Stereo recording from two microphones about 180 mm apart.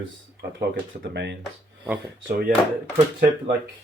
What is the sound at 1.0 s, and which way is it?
Speech, 75° right (ahead or behind).